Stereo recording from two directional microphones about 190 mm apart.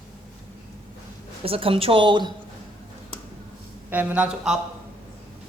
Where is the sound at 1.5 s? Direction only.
30° right (ahead or behind).